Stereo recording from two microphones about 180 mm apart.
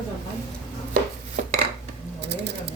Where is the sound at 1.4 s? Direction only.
45° right (ahead or behind).